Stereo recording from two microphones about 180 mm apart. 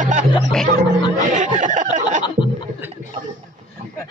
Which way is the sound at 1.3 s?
45° right (ahead or behind).